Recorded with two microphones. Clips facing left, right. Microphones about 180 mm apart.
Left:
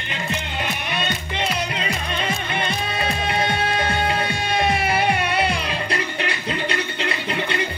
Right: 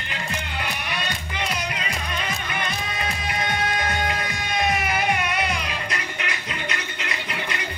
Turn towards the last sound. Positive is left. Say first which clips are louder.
# left 6 dB
turn(degrees=30)  # may be behind; listen again after turning